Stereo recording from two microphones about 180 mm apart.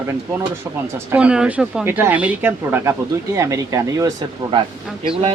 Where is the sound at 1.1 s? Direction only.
5° right (ahead or behind).